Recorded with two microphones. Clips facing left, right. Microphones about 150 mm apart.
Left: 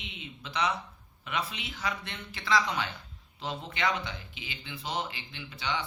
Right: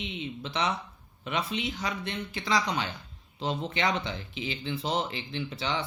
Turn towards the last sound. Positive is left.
turn(degrees=-30)  # may be behind; listen again after turning